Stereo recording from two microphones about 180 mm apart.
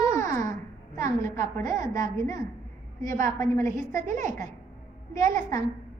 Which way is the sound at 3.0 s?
45° right (ahead or behind).